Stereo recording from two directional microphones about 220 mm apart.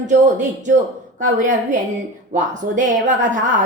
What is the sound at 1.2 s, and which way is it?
A woman's voice, 35° right (ahead or behind).